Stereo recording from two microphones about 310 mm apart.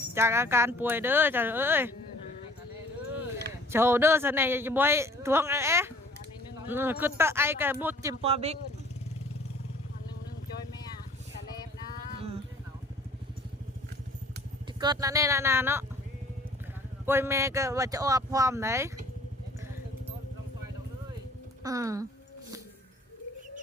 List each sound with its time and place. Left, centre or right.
0.1 s a man's voice: centre
3.7 s a man's voice: centre
8.2 s speech: centre
14.8 s a man's voice: centre
17.1 s a man's voice: centre
21.6 s speech: centre